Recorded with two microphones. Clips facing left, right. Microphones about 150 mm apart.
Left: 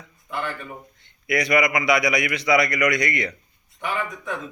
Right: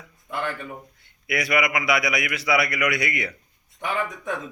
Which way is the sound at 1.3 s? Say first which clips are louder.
Left 3 dB; 5° right (ahead or behind).